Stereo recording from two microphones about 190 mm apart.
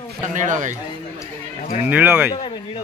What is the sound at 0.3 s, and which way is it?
Speech, 40° right (ahead or behind).